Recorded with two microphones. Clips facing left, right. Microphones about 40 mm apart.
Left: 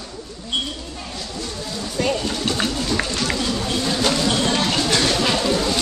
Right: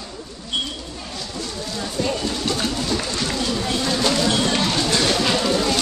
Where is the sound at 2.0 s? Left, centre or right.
Left.